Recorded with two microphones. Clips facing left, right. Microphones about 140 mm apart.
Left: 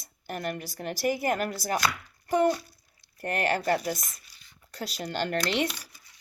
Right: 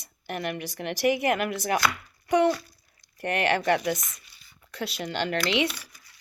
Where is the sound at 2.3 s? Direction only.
85° right.